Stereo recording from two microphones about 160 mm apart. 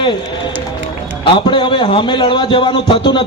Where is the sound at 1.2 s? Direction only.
30° left (ahead or behind).